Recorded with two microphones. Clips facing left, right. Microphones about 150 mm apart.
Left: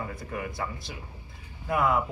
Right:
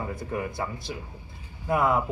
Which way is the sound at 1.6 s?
30° right (ahead or behind).